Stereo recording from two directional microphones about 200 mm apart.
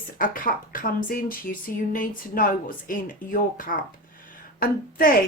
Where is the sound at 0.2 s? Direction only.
45° left (ahead or behind).